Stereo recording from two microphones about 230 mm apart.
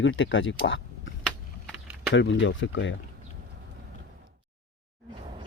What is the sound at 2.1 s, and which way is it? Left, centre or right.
Speech, left.